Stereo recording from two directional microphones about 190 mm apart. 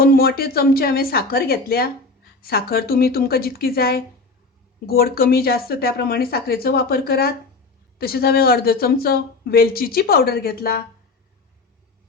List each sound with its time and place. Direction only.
0.0 s a woman's voice: 50° left (ahead or behind)